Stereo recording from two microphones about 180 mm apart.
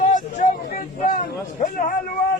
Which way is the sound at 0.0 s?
45° left (ahead or behind).